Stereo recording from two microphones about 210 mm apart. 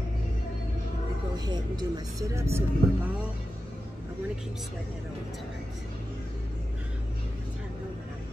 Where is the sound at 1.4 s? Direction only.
20° right (ahead or behind).